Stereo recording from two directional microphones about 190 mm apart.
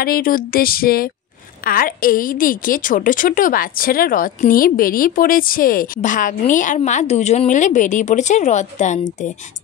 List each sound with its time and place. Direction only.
0.0 s a woman's voice: 50° left (ahead or behind)